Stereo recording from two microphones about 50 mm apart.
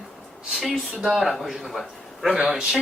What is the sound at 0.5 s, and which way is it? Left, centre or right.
A man's voice, centre.